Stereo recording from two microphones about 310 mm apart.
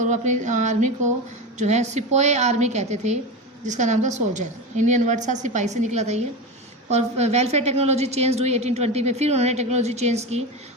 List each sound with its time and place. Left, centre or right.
0.0 s a woman's voice: right